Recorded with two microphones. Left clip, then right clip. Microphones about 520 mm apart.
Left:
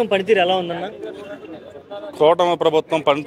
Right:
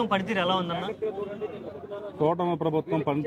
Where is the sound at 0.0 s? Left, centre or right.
Centre.